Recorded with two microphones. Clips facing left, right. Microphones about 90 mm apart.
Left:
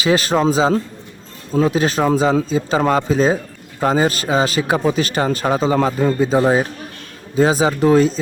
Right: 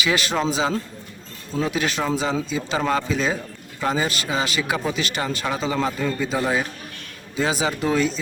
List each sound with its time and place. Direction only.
0.0 s speech: 35° left (ahead or behind)